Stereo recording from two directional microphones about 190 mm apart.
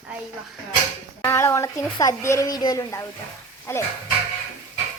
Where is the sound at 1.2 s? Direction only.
15° left (ahead or behind).